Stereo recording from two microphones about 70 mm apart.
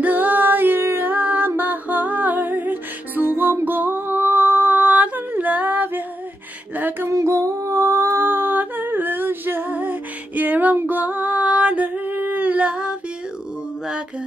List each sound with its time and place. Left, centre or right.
0.0 s music: right
3.6 s female singing: right
6.7 s a sound: right
7.1 s female singing: right; by 12.9 s centre